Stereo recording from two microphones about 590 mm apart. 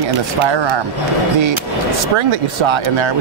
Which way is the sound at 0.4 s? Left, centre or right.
Right.